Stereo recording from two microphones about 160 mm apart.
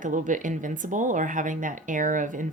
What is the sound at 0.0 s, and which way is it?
A woman's voice, 55° right (ahead or behind).